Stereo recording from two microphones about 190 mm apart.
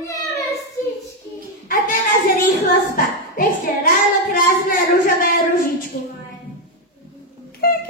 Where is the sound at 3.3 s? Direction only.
50° left (ahead or behind).